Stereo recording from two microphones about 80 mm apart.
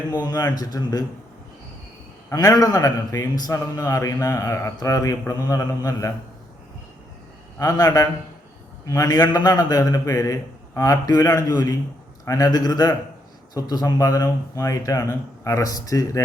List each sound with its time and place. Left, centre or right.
0.1 s speech: left
2.3 s speech: left
3.5 s speech: left
7.6 s a man's voice: left
12.5 s speech: left